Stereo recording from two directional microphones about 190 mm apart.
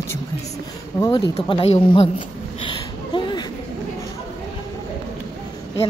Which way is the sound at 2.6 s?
25° left (ahead or behind).